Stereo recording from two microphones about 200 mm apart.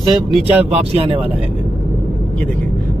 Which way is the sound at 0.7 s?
30° right (ahead or behind).